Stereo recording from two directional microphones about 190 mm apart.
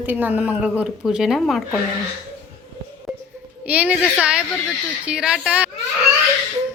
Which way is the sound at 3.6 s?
10° right (ahead or behind).